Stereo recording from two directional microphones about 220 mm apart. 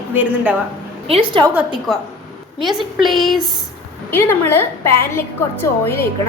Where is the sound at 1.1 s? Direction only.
25° right (ahead or behind).